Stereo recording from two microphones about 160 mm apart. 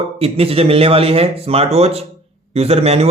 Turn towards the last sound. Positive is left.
turn(degrees=-40)  # may be behind; listen again after turning